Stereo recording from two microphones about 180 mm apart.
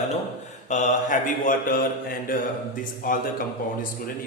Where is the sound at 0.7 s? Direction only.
45° left (ahead or behind).